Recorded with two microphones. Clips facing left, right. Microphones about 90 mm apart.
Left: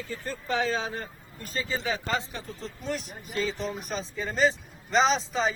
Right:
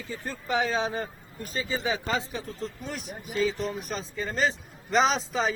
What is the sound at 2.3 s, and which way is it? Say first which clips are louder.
Speech: right 4 dB; centre (ahead or behind).